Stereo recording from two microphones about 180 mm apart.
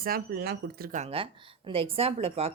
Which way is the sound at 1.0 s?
35° right (ahead or behind).